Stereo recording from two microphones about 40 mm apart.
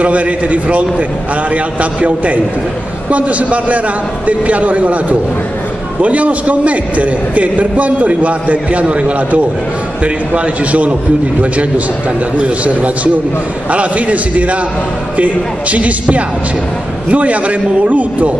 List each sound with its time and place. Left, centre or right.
0.0 s a man's voice: right
6.0 s a man's voice: right
12.4 s a man's voice: right